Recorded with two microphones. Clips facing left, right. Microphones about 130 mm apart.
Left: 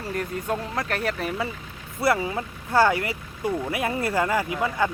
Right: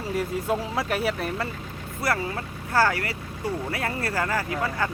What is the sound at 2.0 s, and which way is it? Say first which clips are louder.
Speech: left 4 dB; 20° left (ahead or behind).